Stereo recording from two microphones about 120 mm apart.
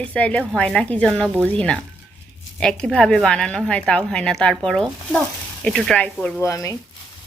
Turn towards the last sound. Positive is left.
turn(degrees=25)  # may be behind; listen again after turning